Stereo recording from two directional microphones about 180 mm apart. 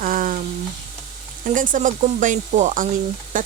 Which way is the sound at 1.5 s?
45° right (ahead or behind).